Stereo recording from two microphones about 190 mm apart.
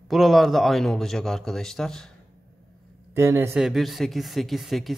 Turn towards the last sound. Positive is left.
turn(degrees=0)  # may be behind; listen again after turning